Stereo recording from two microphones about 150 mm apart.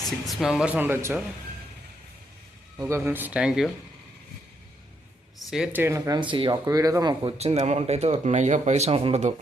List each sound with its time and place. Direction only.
0.3 s speech: centre (ahead or behind)
2.7 s speech: 15° right (ahead or behind)
5.4 s speech: centre (ahead or behind); by 6.2 s 20° right (ahead or behind)
6.3 s speech: 35° right (ahead or behind)
6.7 s speech: 20° right (ahead or behind)
7.3 s speech: 45° right (ahead or behind)